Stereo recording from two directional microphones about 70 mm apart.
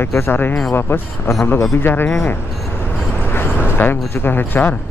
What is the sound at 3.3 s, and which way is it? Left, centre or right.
Speech, left.